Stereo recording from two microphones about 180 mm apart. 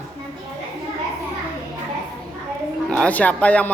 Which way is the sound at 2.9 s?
10° left (ahead or behind).